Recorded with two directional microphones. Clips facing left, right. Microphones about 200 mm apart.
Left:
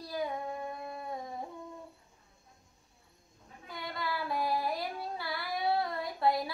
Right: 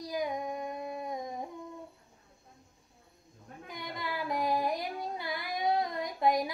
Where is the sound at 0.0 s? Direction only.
15° right (ahead or behind).